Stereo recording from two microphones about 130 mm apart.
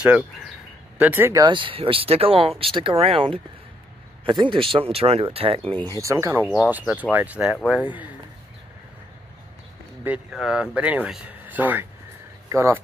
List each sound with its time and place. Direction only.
0.9 s speech: 15° right (ahead or behind)
1.4 s speech: 40° right (ahead or behind)
5.9 s speech: 25° right (ahead or behind)
10.0 s speech: 5° right (ahead or behind); by 12.8 s 20° right (ahead or behind)